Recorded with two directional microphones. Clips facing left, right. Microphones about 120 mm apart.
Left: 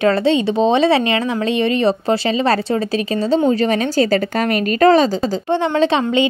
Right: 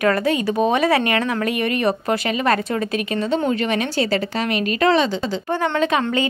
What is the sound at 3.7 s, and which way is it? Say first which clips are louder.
A woman's voice: left 5 dB; 40° left (ahead or behind).